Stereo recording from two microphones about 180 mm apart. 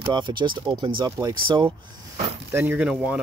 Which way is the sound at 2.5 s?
10° right (ahead or behind).